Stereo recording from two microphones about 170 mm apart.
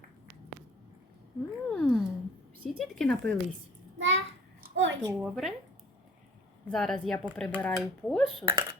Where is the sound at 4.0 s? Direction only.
90° right.